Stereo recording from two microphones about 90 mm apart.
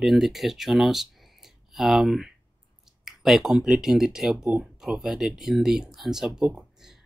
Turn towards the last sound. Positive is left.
turn(degrees=-5)  # may be behind; listen again after turning